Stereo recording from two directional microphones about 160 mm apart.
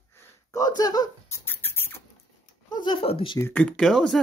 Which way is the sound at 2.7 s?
30° left (ahead or behind).